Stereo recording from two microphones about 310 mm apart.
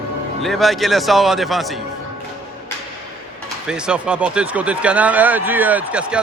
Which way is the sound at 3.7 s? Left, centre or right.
Centre.